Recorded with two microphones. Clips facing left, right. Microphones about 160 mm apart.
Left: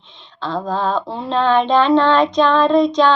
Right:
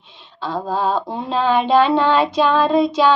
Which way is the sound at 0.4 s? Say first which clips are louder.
Even; 10° right (ahead or behind).